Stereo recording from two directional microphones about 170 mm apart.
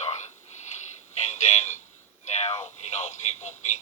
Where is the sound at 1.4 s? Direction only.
40° left (ahead or behind).